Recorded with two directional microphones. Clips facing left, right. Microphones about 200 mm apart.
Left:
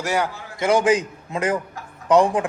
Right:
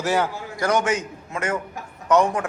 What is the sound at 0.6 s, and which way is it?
A man's voice, 30° left (ahead or behind).